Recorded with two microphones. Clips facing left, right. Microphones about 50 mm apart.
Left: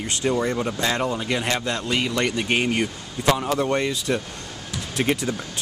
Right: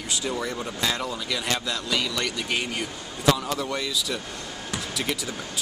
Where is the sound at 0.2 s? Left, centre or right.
Left.